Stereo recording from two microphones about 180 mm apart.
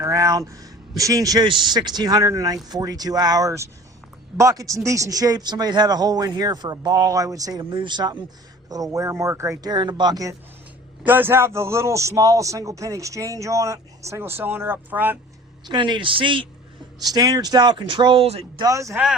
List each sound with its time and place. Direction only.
0.0 s a man's voice: 15° right (ahead or behind)
11.0 s a man's voice: 10° right (ahead or behind)
15.6 s a man's voice: 25° right (ahead or behind)
18.6 s a man's voice: 15° right (ahead or behind)